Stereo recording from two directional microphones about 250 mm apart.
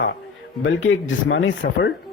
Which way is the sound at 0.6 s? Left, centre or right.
Left.